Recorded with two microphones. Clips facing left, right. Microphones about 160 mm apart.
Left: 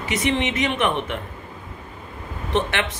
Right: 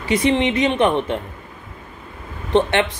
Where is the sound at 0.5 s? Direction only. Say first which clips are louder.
Right 5 dB; 25° right (ahead or behind).